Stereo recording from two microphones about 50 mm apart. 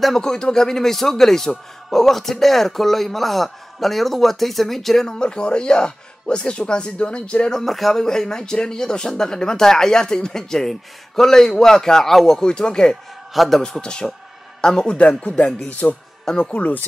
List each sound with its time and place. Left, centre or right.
0.0 s speech: centre
7.5 s speech: centre
12.4 s speech: centre
13.3 s a man's voice: centre
13.6 s speech: centre
15.0 s speech: left
16.3 s speech: centre